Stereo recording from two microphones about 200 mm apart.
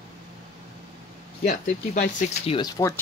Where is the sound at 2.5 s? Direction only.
20° left (ahead or behind).